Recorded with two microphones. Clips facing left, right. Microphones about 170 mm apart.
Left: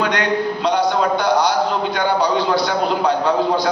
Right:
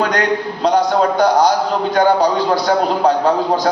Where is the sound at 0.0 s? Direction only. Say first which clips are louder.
Right 2 dB; 45° right (ahead or behind).